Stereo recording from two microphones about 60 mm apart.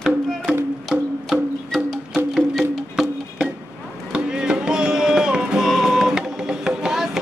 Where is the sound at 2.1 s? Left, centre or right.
Centre.